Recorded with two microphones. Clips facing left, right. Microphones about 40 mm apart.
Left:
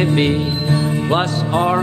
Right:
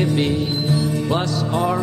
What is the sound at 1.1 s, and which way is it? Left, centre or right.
Music, left.